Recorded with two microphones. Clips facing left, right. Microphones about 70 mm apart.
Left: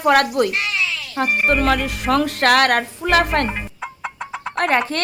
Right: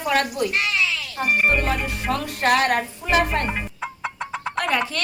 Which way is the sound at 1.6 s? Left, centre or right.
Left.